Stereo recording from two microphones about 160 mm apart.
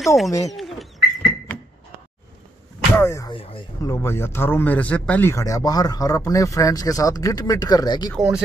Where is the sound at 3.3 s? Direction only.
35° left (ahead or behind).